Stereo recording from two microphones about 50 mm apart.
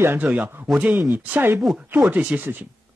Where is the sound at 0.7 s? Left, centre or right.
Right.